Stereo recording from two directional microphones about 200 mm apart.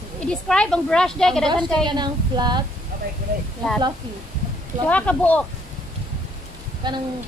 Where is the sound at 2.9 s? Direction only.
45° right (ahead or behind).